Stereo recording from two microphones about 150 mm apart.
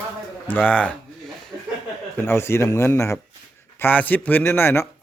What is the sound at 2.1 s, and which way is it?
Speech, 15° left (ahead or behind).